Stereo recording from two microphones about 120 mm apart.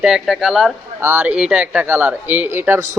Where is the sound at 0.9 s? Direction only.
15° right (ahead or behind).